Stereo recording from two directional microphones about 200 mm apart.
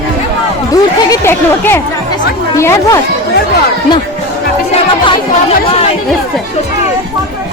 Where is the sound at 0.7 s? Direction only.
15° left (ahead or behind).